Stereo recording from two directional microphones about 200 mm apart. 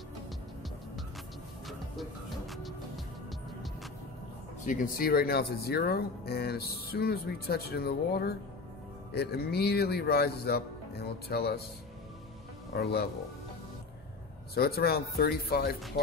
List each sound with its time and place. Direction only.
1.7 s music: centre (ahead or behind)
4.6 s speech: 45° left (ahead or behind)
12.7 s speech: 50° left (ahead or behind)
14.5 s speech: 50° left (ahead or behind)